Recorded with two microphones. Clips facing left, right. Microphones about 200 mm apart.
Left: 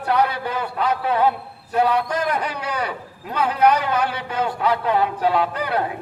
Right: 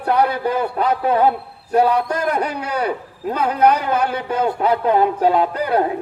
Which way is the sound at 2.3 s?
50° right (ahead or behind).